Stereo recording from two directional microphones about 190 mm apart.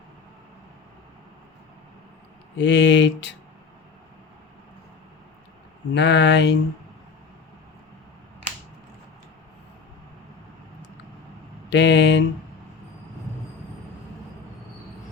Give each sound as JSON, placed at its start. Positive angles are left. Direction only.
{"t": 2.6, "sound": "speech", "side_deg": 65}
{"t": 5.9, "sound": "a sound", "side_deg": 65}
{"t": 11.7, "sound": "speech", "side_deg": 65}